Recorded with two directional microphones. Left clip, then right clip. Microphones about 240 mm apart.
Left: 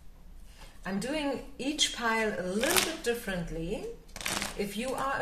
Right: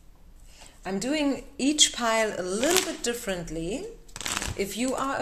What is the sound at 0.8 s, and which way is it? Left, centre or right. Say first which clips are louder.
Speech: right 5 dB; right.